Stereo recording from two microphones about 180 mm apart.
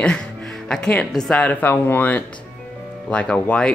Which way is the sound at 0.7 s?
5° left (ahead or behind).